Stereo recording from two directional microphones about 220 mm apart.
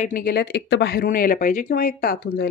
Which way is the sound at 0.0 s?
40° left (ahead or behind).